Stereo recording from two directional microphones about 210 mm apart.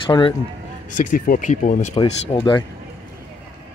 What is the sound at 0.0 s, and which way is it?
Speech, 25° left (ahead or behind).